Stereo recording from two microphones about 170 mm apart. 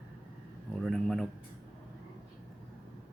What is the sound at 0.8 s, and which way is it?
Speech, centre (ahead or behind).